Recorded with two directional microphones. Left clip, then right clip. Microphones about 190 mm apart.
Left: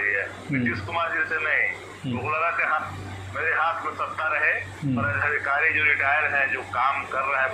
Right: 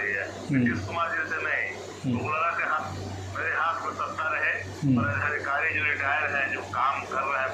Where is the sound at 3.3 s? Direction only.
15° left (ahead or behind).